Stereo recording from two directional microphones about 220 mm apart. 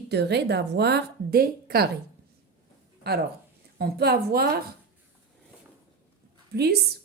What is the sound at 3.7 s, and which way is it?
Speech, 45° right (ahead or behind).